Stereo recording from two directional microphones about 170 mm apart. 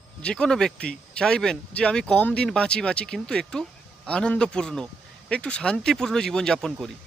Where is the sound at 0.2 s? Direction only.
5° left (ahead or behind).